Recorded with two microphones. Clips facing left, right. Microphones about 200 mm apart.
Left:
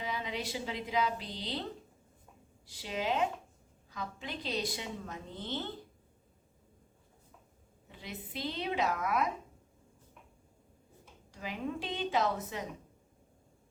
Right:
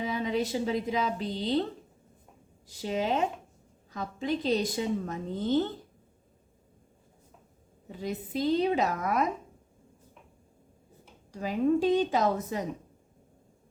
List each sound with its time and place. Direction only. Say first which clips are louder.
0.0 s a woman's voice: right 9 dB; 45° right (ahead or behind)
2.6 s a woman's voice: right 5 dB; 45° right (ahead or behind)
7.9 s a woman's voice: right 11 dB; 45° right (ahead or behind)
11.3 s a woman's voice: right 12 dB; 45° right (ahead or behind)